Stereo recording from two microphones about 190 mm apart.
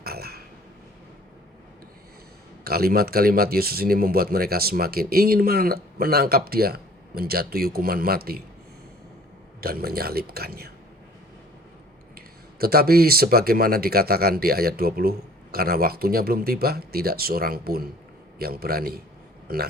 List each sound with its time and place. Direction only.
0.0 s a sound: 55° right (ahead or behind)
2.6 s speech: 55° right (ahead or behind)
9.6 s speech: 55° right (ahead or behind)
12.1 s speech: 55° right (ahead or behind)